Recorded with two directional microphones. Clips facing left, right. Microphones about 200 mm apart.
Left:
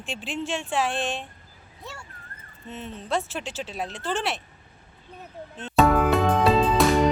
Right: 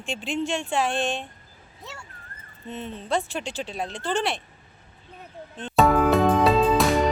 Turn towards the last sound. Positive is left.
turn(degrees=0)  # may be behind; listen again after turning